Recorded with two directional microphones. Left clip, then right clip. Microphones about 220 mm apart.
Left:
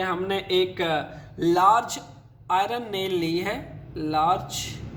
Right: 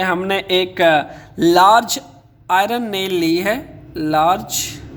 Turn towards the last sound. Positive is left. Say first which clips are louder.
# right 7 dB
turn(degrees=-45)  # may be behind; listen again after turning